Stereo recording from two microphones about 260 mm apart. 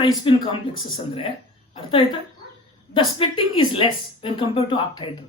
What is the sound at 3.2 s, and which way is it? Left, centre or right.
A woman's voice, centre.